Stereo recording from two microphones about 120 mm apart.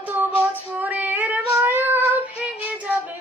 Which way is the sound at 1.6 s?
15° right (ahead or behind).